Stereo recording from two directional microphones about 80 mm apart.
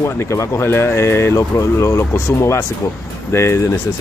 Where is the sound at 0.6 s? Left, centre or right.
Left.